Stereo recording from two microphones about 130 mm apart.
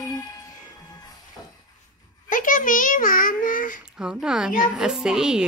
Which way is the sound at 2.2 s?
90° left.